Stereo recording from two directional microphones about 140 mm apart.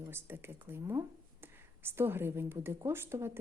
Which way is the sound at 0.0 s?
15° right (ahead or behind).